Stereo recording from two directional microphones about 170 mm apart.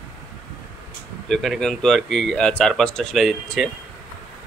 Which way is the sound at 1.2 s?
Centre (ahead or behind).